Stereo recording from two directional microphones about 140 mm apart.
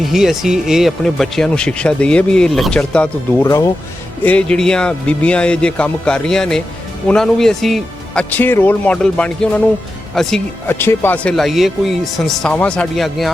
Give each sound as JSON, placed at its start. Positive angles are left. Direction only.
{"t": 0.0, "sound": "speech", "side_deg": 0}
{"t": 3.4, "sound": "speech", "side_deg": 25}
{"t": 4.2, "sound": "speech", "side_deg": 10}
{"t": 10.7, "sound": "speech", "side_deg": 15}